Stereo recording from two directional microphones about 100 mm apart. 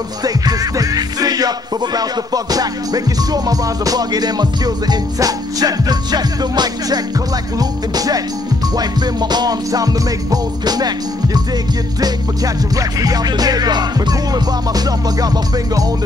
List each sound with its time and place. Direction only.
0.2 s music: 40° right (ahead or behind)
12.7 s music: 40° right (ahead or behind)